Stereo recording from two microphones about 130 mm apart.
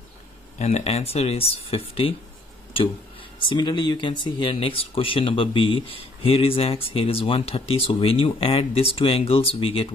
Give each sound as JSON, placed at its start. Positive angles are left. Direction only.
{"t": 0.6, "sound": "speech", "side_deg": 55}